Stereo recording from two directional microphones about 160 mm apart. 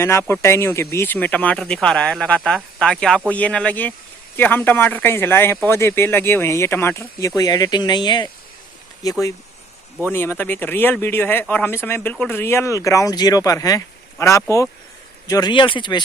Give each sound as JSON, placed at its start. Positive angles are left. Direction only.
{"t": 0.0, "sound": "speech", "side_deg": 15}
{"t": 10.1, "sound": "speech", "side_deg": 15}